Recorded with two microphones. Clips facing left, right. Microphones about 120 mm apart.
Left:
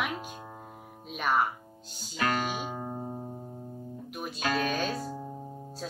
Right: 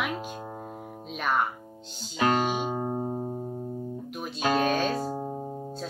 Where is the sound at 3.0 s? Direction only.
50° right (ahead or behind).